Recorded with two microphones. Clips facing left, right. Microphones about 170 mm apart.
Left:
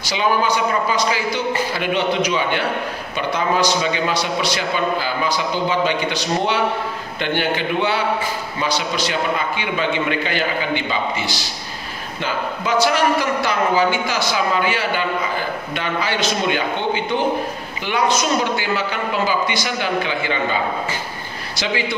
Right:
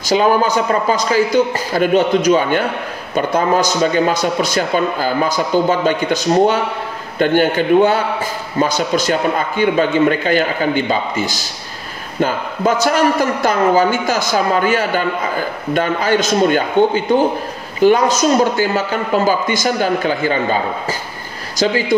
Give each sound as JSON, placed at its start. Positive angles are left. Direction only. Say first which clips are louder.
{"t": 0.1, "sound": "a man's voice", "louder": "right 6 dB", "side_deg": -45}
{"t": 21.5, "sound": "a man's voice", "louder": "right 7 dB", "side_deg": -45}